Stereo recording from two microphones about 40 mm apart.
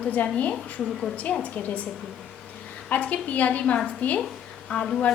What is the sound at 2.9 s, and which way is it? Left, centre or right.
A woman's voice, left.